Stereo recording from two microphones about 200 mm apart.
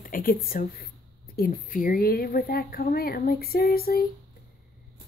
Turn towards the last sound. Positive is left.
turn(degrees=50)  # may be behind; listen again after turning